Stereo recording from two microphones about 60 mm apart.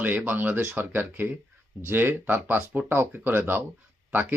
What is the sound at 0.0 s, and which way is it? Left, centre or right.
A man's voice, right.